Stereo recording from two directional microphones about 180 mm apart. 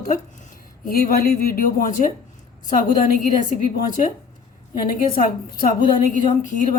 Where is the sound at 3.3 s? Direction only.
45° left (ahead or behind).